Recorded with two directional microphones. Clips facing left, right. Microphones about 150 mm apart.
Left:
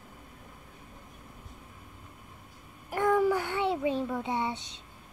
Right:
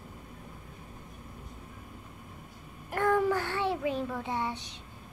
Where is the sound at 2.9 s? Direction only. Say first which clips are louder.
Left 1 dB; 15° left (ahead or behind).